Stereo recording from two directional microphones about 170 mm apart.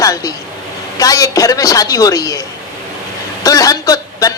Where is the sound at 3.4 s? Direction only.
20° left (ahead or behind).